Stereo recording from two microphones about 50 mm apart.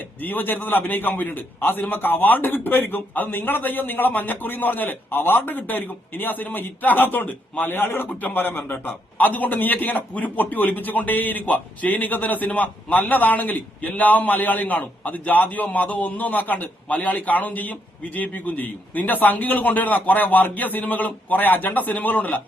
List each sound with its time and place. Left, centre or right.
0.2 s a man's voice: left